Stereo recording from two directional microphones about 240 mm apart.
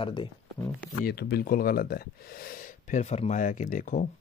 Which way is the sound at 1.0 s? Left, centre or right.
Left.